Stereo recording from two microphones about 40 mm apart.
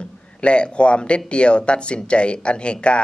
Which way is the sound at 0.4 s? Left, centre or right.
Left.